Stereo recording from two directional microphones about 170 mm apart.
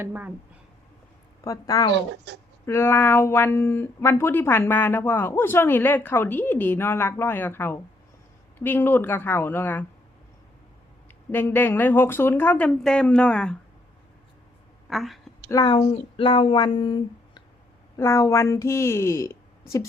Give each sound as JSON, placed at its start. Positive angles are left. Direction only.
{"t": 0.0, "sound": "speech", "side_deg": -10}
{"t": 1.5, "sound": "a sound", "side_deg": 20}
{"t": 1.9, "sound": "speech", "side_deg": -90}
{"t": 2.6, "sound": "speech", "side_deg": 15}
{"t": 11.3, "sound": "speech", "side_deg": 10}
{"t": 14.8, "sound": "a woman's voice", "side_deg": 0}
{"t": 15.4, "sound": "a woman's voice", "side_deg": 20}
{"t": 15.7, "sound": "a sound", "side_deg": 35}
{"t": 17.9, "sound": "speech", "side_deg": 15}